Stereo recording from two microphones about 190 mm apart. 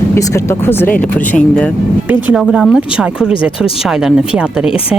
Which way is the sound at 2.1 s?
5° right (ahead or behind).